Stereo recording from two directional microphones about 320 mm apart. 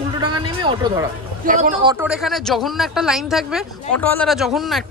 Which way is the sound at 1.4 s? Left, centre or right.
Right.